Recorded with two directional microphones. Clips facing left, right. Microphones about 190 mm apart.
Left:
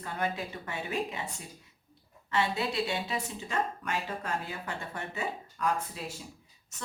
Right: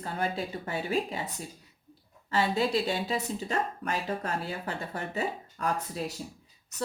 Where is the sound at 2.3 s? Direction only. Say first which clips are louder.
Right 4 dB; 35° right (ahead or behind).